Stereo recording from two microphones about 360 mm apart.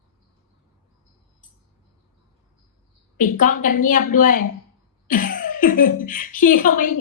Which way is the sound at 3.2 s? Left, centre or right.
Left.